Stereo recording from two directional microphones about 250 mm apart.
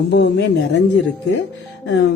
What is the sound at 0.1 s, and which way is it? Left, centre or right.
Speech, left.